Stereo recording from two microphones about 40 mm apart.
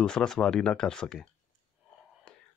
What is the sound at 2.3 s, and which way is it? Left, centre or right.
Whispering, left.